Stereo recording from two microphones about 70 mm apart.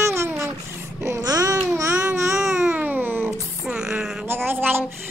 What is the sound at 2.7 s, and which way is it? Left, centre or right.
Babbling, right.